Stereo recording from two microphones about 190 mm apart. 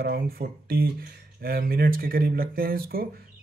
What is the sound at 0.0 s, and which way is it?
Speech, 55° right (ahead or behind).